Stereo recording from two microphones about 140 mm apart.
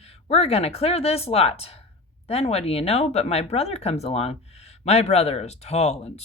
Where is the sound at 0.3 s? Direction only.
45° left (ahead or behind).